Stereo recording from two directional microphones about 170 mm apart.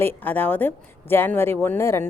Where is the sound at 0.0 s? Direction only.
10° left (ahead or behind).